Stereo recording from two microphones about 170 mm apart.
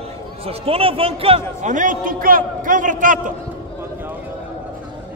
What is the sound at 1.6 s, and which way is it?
A man's voice, 50° right (ahead or behind).